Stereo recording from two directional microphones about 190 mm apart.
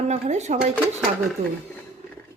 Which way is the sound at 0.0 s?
35° right (ahead or behind).